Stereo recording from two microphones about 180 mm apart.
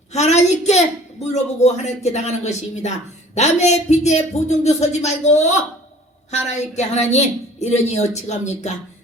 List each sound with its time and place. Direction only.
0.1 s a woman's voice: 40° left (ahead or behind)